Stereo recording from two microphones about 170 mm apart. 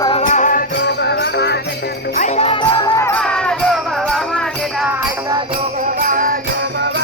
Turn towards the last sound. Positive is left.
turn(degrees=-55)  # may be behind; listen again after turning